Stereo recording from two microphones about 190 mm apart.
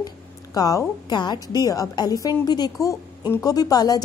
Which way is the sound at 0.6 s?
20° left (ahead or behind).